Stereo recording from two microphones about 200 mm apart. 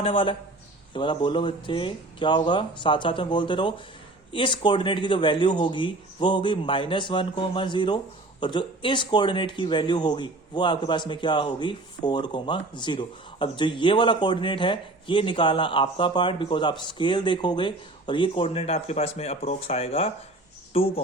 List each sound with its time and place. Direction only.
0.0 s speech: 25° left (ahead or behind)